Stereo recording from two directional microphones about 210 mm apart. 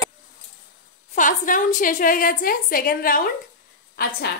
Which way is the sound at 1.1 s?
40° left (ahead or behind).